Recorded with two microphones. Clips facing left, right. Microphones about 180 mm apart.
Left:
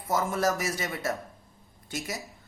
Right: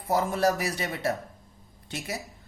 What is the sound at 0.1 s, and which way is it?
A woman's voice, 30° right (ahead or behind).